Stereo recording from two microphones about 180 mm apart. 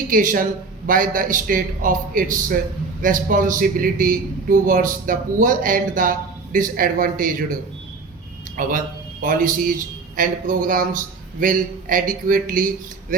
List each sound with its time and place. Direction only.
0.1 s a man's voice: 50° right (ahead or behind)
8.5 s a man's voice: 50° right (ahead or behind)